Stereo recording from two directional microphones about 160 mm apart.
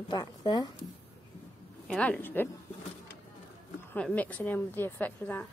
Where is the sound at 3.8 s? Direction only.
10° left (ahead or behind).